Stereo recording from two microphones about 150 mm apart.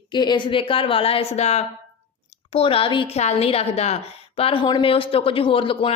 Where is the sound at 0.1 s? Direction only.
30° left (ahead or behind).